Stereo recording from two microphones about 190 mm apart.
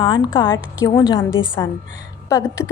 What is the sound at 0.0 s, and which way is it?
A woman's voice, 25° left (ahead or behind).